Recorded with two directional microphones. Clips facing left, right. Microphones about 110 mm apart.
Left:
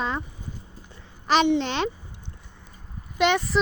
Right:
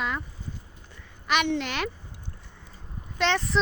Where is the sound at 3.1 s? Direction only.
15° left (ahead or behind).